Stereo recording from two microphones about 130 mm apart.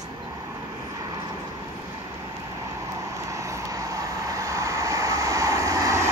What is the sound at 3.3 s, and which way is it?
Vehicle, 25° right (ahead or behind).